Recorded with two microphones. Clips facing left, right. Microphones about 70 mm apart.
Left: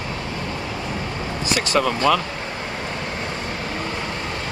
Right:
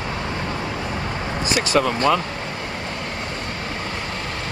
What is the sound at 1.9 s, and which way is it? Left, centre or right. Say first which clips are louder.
Speech: even; right.